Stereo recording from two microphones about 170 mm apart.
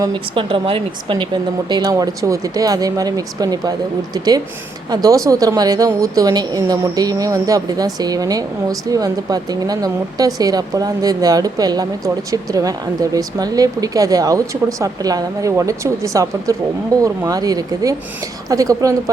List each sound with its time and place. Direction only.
0.0 s speech: 30° right (ahead or behind)